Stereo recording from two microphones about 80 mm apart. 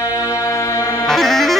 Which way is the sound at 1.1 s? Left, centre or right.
Centre.